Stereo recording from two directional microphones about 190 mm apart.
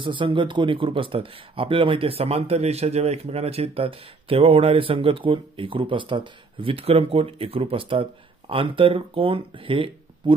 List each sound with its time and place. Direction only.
0.0 s speech: 25° right (ahead or behind)